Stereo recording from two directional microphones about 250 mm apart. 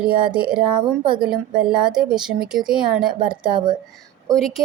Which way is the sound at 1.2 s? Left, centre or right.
Centre.